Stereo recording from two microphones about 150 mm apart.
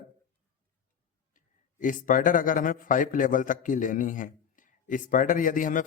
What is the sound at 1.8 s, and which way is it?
A man's voice, 60° left (ahead or behind).